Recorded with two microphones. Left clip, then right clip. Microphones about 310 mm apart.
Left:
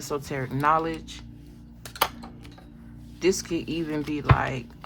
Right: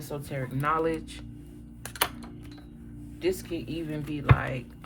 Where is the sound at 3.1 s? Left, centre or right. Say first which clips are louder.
Left 5 dB; left.